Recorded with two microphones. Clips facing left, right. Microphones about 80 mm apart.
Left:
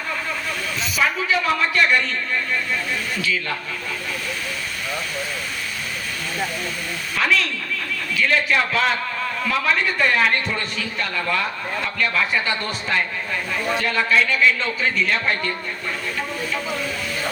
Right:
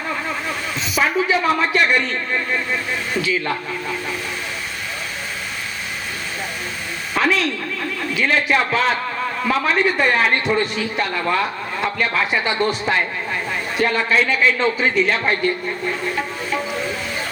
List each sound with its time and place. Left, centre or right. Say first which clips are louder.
0.9 s speech: right 3 dB; right
7.2 s speech: right 3 dB; right